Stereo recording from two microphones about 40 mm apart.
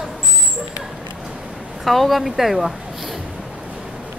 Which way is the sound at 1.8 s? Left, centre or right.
Centre.